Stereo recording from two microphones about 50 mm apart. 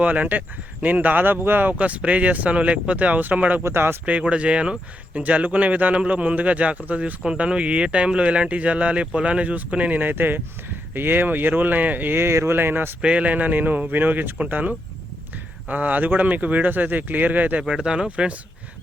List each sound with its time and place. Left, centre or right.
0.0 s speech: right
3.6 s speech: right
4.0 s speech: right
12.1 s speech: right
12.5 s speech: right
13.0 s speech: right
15.6 s speech: right
17.7 s speech: centre